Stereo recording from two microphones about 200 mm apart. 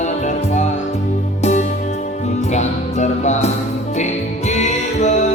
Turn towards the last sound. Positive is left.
turn(degrees=35)  # may be behind; listen again after turning